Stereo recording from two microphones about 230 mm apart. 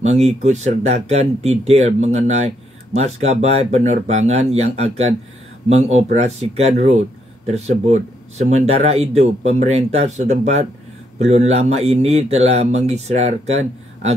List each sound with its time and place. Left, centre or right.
0.0 s speech: right